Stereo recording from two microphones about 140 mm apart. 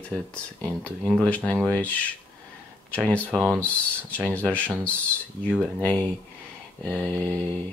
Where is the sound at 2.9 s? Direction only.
10° left (ahead or behind).